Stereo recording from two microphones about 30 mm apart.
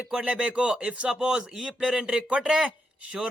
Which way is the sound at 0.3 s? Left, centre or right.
Right.